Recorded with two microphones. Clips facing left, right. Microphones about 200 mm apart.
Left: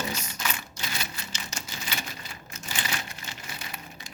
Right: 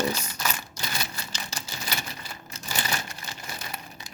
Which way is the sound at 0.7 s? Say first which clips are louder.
Right 2 dB; 35° right (ahead or behind).